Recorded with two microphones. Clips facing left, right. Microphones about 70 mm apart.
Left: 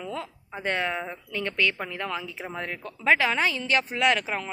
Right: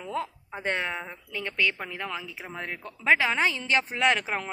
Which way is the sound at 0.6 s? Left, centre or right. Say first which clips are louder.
Left 2 dB; centre.